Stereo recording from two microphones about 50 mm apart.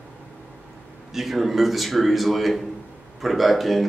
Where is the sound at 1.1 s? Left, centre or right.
Centre.